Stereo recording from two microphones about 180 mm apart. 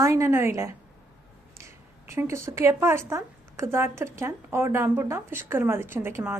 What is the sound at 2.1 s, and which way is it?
A woman's voice, 15° right (ahead or behind).